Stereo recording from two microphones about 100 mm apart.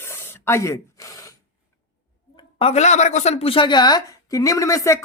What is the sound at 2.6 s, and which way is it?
Speech, 80° left.